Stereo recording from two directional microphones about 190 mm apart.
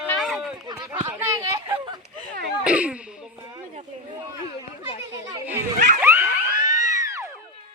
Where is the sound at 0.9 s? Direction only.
10° right (ahead or behind).